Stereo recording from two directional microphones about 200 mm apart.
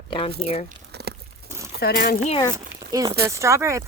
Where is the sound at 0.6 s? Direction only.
55° right (ahead or behind).